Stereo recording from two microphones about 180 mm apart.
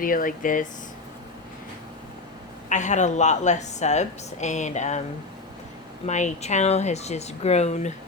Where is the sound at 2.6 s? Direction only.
40° left (ahead or behind).